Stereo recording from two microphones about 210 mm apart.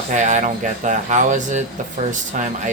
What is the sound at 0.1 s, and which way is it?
Speech, 35° right (ahead or behind).